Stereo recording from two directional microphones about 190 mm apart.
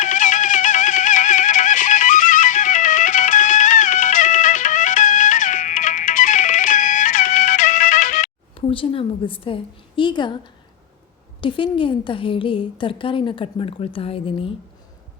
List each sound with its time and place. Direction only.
0.0 s music: 45° left (ahead or behind); by 10.5 s 25° left (ahead or behind)
11.3 s a woman's voice: 25° left (ahead or behind)